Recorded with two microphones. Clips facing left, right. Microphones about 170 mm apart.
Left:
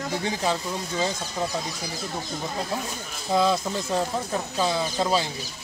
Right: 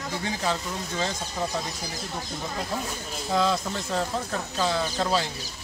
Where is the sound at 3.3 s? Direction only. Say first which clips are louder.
Left 3 dB; 15° left (ahead or behind).